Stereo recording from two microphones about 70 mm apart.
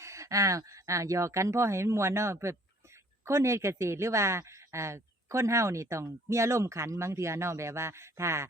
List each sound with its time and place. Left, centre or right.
0.0 s speech: right